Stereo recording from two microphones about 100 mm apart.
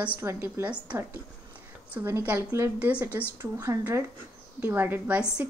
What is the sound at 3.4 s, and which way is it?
A woman's voice, 30° right (ahead or behind).